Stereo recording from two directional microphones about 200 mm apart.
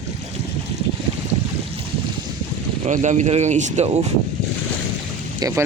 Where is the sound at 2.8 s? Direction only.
35° right (ahead or behind).